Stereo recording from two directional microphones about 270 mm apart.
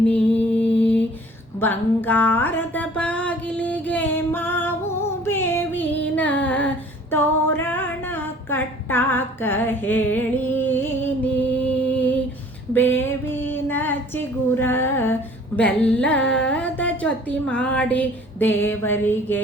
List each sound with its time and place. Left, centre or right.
0.6 s mantra: centre
1.5 s a sound: centre
7.1 s female singing: centre
11.5 s music: centre
12.7 s female singing: centre
15.5 s a woman's voice: centre